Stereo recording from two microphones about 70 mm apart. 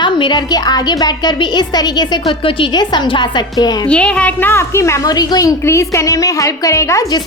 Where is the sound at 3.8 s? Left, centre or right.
Centre.